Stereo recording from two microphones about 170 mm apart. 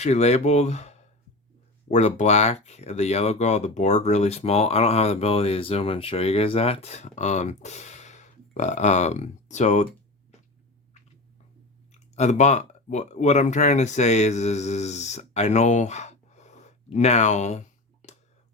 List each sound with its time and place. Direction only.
0.0 s speech: 40° left (ahead or behind)
11.9 s speech: 40° left (ahead or behind)